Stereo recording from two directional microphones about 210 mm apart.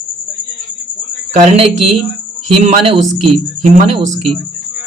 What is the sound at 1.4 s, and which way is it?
A man's voice, 25° right (ahead or behind).